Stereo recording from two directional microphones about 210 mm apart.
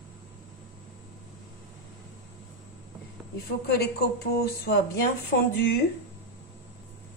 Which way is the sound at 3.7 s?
50° left (ahead or behind).